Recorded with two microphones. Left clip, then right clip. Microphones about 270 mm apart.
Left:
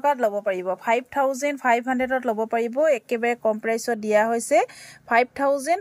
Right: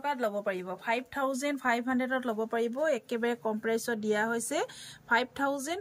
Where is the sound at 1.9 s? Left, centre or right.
Left.